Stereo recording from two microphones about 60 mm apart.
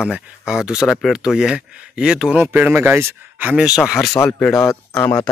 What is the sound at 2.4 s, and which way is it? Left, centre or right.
Speech, right.